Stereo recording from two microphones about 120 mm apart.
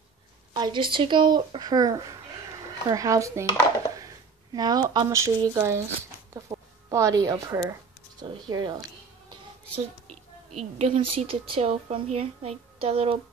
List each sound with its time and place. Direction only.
0.5 s speech: 40° right (ahead or behind); by 3.4 s 25° right (ahead or behind)
4.6 s speech: 35° right (ahead or behind)
6.5 s a sound: 30° right (ahead or behind)
6.9 s speech: 25° right (ahead or behind)
8.2 s speech: 40° right (ahead or behind)
10.6 s a woman's voice: 60° right (ahead or behind)